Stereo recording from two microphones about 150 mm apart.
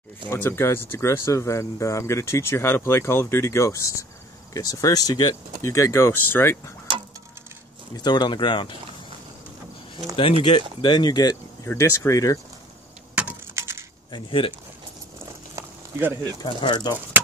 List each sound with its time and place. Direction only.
0.3 s speech: 15° left (ahead or behind)
7.9 s speech: 30° left (ahead or behind)
10.1 s speech: 35° left (ahead or behind)
13.1 s a sound: 10° right (ahead or behind)
14.1 s speech: 35° left (ahead or behind)
15.5 s a sound: 15° right (ahead or behind)
16.4 s speech: 30° left (ahead or behind)